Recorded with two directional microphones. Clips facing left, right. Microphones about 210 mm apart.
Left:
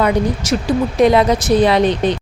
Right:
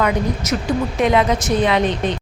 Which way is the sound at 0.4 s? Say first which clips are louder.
Left 3 dB; 30° left (ahead or behind).